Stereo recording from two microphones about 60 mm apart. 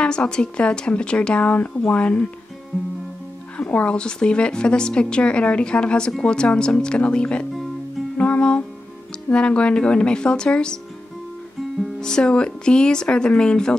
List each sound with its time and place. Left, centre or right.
0.0 s speech: centre
3.5 s a woman's voice: left
8.2 s music: left
9.3 s a woman's voice: centre
12.0 s a woman's voice: centre